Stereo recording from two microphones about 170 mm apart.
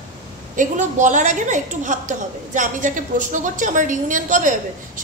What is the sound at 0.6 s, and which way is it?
A woman's voice, 45° right (ahead or behind).